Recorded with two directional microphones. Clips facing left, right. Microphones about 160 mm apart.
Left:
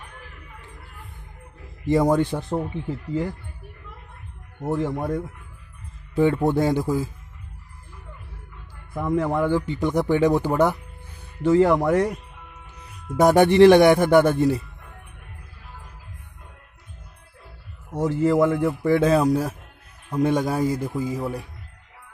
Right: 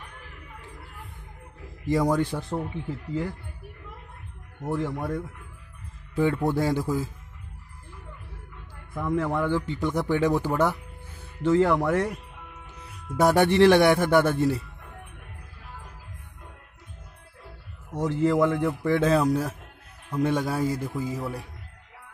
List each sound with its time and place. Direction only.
1.9 s speech: 25° left (ahead or behind)
4.6 s speech: 25° left (ahead or behind)
9.1 s a man's voice: 20° left (ahead or behind)
13.1 s a man's voice: 20° left (ahead or behind)
17.9 s a man's voice: 10° left (ahead or behind)